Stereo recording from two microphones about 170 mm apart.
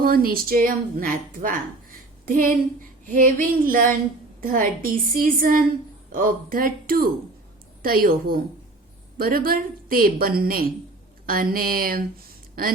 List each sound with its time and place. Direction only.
0.0 s a woman's voice: 60° right (ahead or behind)